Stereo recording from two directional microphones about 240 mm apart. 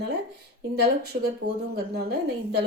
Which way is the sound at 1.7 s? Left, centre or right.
Right.